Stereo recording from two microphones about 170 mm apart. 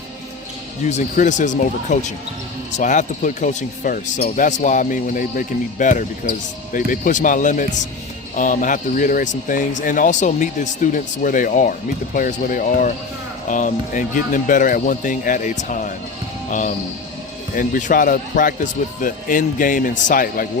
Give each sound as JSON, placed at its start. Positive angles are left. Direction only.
{"t": 0.9, "sound": "speech", "side_deg": 45}